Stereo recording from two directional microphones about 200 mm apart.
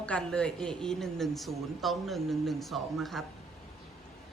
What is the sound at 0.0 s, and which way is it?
A woman's voice, 5° left (ahead or behind).